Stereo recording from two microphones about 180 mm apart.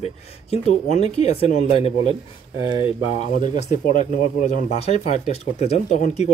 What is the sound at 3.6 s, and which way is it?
Speech, 40° left (ahead or behind).